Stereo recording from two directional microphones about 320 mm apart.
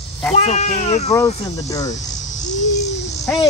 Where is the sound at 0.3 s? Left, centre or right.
Centre.